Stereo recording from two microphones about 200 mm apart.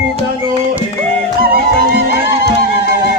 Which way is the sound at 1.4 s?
50° right (ahead or behind).